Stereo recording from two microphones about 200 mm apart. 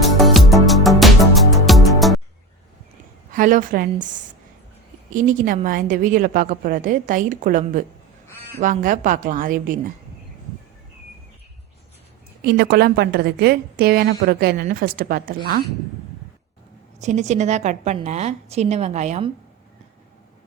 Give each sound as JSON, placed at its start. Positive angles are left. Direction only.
{"t": 0.0, "sound": "music", "side_deg": 0}
{"t": 3.3, "sound": "a woman's voice", "side_deg": -40}
{"t": 12.4, "sound": "a woman's voice", "side_deg": -50}
{"t": 17.0, "sound": "a woman's voice", "side_deg": -35}